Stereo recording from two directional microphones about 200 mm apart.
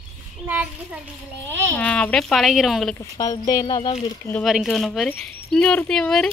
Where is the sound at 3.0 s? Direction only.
20° left (ahead or behind).